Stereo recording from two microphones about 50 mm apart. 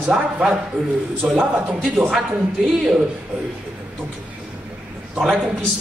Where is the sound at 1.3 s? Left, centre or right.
Centre.